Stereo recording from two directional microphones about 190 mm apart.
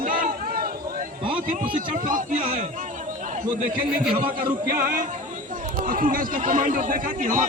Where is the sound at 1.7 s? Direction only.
40° right (ahead or behind).